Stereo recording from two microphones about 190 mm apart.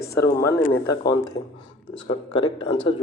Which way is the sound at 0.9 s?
20° left (ahead or behind).